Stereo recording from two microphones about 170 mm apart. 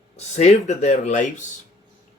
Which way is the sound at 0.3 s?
40° left (ahead or behind).